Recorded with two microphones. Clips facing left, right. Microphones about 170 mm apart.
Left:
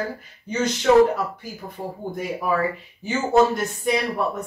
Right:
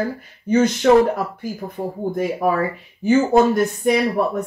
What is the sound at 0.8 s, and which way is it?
Speech, 50° right (ahead or behind).